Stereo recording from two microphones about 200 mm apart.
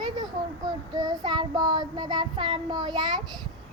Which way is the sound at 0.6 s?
20° right (ahead or behind).